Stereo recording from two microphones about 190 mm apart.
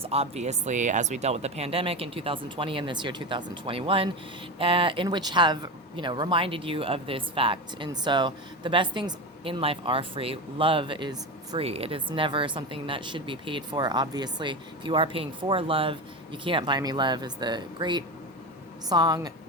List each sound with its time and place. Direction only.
0.0 s speech: 30° right (ahead or behind)